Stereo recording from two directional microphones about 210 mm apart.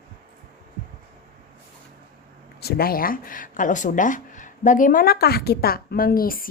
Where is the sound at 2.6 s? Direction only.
45° left (ahead or behind).